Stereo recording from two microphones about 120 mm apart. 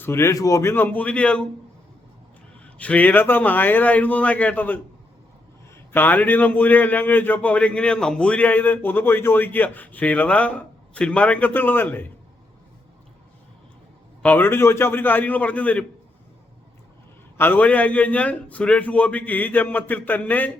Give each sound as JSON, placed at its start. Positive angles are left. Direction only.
{"t": 0.0, "sound": "a man's voice", "side_deg": 20}
{"t": 2.7, "sound": "a man's voice", "side_deg": 10}
{"t": 14.2, "sound": "a man's voice", "side_deg": 15}
{"t": 17.3, "sound": "a man's voice", "side_deg": 15}